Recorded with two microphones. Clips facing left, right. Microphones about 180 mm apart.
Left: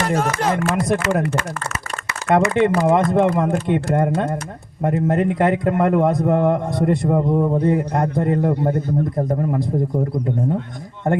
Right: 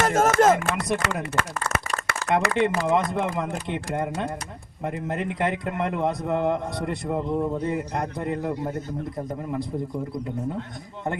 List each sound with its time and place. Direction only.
0.0 s speech: 45° right (ahead or behind)
0.8 s a man's voice: 50° left (ahead or behind)
2.3 s a man's voice: 55° left (ahead or behind)